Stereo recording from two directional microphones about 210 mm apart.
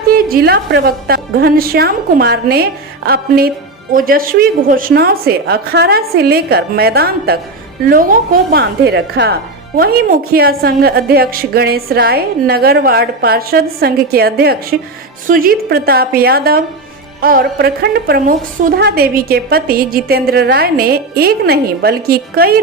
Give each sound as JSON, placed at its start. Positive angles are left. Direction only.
{"t": 0.1, "sound": "speech", "side_deg": -45}
{"t": 8.5, "sound": "speech", "side_deg": -50}